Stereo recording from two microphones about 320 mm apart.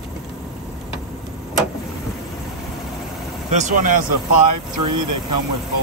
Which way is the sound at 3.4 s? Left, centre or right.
Right.